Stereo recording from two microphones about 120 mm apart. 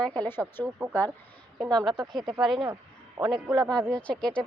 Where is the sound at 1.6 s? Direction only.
35° right (ahead or behind).